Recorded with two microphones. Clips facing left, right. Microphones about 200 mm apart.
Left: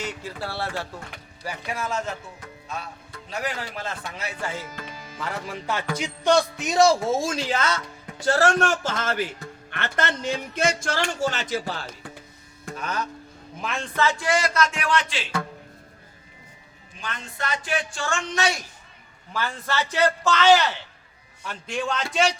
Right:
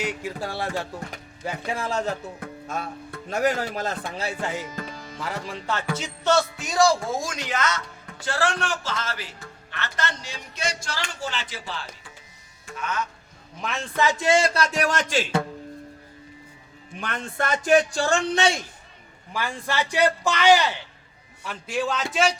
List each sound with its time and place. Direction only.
0.0 s a man's voice: 15° right (ahead or behind)
1.5 s speech: 30° right (ahead or behind)
2.4 s speech: 50° right (ahead or behind); by 4.4 s 30° right (ahead or behind)
4.4 s a man's voice: 15° right (ahead or behind)
4.9 s music: 5° left (ahead or behind)
5.2 s a man's voice: centre (ahead or behind); by 7.8 s 30° left (ahead or behind)
8.2 s a man's voice: 45° left (ahead or behind)
12.6 s music: 35° left (ahead or behind)
13.6 s a man's voice: centre (ahead or behind)
13.9 s speech: 15° right (ahead or behind); by 15.3 s 45° right (ahead or behind)
17.0 s a man's voice: 60° right (ahead or behind); by 18.6 s 30° right (ahead or behind)
19.3 s a man's voice: 15° right (ahead or behind)